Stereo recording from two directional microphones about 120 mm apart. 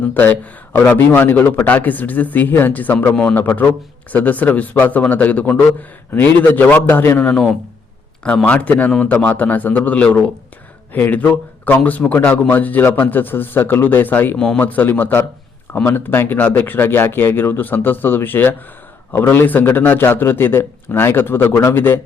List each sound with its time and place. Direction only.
0.1 s a man's voice: 15° left (ahead or behind)